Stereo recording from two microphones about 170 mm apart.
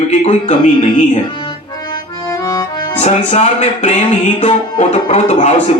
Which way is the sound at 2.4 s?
25° left (ahead or behind).